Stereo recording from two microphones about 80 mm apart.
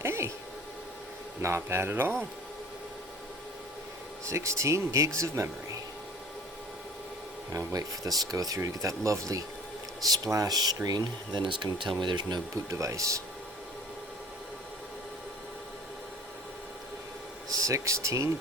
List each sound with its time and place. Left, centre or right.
0.0 s a sound: right
1.4 s speech: right
4.3 s speech: right
7.5 s speech: right
11.9 s speech: right
12.7 s speech: right
17.6 s speech: right